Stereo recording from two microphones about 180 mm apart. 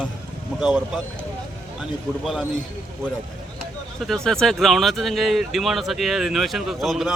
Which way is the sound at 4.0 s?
Centre (ahead or behind).